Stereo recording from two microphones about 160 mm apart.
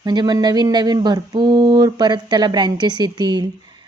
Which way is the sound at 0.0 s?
25° right (ahead or behind).